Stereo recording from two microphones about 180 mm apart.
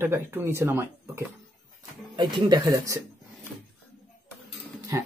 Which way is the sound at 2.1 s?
25° right (ahead or behind).